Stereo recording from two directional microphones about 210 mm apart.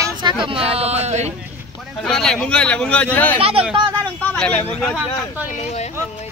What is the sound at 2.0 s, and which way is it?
Speech, 5° left (ahead or behind).